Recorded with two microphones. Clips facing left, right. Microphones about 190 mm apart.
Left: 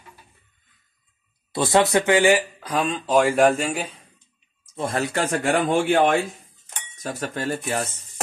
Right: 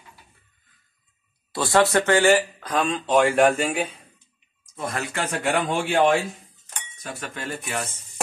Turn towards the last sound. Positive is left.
turn(degrees=35)  # may be behind; listen again after turning